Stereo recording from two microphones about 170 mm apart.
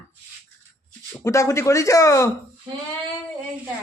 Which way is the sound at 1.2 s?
15° left (ahead or behind).